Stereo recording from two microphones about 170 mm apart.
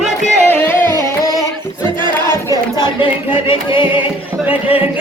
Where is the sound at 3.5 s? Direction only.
30° left (ahead or behind).